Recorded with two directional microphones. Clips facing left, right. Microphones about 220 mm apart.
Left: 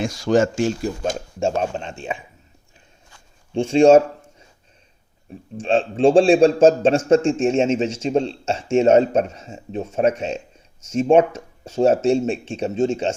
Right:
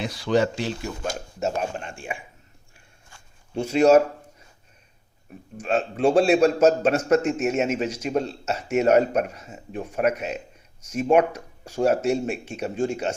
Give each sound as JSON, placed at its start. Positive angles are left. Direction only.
{"t": 0.0, "sound": "speech", "side_deg": 45}
{"t": 1.4, "sound": "a man's voice", "side_deg": 30}
{"t": 3.5, "sound": "a man's voice", "side_deg": 25}
{"t": 5.5, "sound": "a man's voice", "side_deg": 30}